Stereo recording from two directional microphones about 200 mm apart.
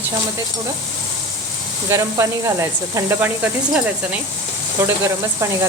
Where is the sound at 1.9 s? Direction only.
15° right (ahead or behind).